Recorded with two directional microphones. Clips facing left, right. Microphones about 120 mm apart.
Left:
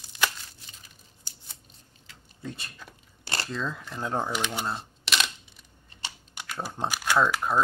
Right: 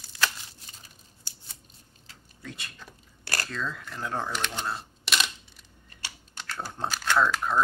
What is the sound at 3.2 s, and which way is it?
Speech, 20° left (ahead or behind).